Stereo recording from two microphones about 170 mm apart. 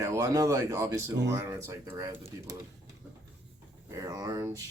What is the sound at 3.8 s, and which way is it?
Speech, 20° right (ahead or behind).